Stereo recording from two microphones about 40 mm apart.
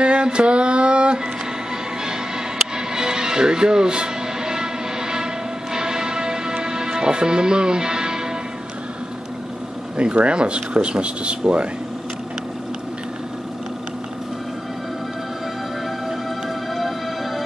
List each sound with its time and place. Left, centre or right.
0.0 s a sound: right
2.9 s music: centre
9.9 s speech: right